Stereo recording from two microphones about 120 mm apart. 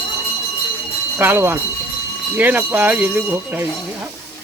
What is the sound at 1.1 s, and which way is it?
Speech, 15° right (ahead or behind).